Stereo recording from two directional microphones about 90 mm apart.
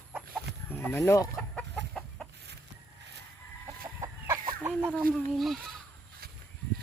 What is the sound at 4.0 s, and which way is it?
Chicken, 40° right (ahead or behind).